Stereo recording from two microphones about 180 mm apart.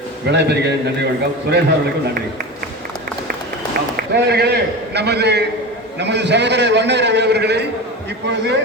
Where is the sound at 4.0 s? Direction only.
65° right (ahead or behind).